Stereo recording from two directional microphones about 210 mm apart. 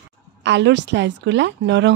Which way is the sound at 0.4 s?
60° right (ahead or behind).